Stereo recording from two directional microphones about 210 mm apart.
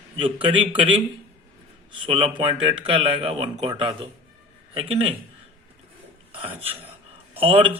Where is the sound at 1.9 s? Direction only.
25° right (ahead or behind).